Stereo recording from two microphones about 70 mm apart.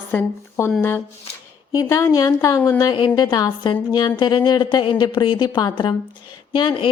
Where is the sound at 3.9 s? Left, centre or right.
Left.